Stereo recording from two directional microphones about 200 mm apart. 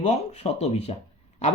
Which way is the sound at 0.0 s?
35° left (ahead or behind).